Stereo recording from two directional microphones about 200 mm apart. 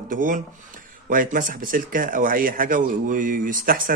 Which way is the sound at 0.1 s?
40° right (ahead or behind).